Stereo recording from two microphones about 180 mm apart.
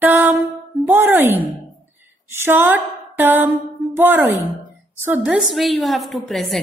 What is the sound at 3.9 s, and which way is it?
A woman's voice, 15° right (ahead or behind).